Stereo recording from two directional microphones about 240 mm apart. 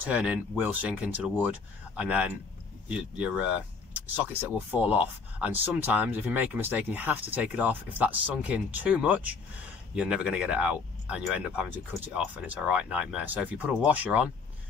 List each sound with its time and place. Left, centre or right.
0.0 s speech: centre